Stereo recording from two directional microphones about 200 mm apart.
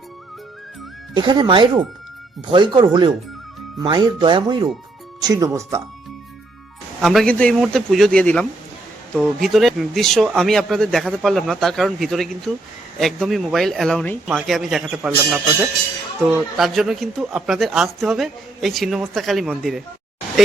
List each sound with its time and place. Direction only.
1.1 s speech: 25° right (ahead or behind)
7.0 s speech: centre (ahead or behind)